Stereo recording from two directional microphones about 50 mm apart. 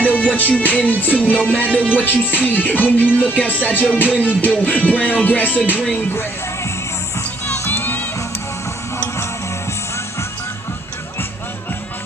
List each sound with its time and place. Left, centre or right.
0.0 s music: left
7.4 s music: left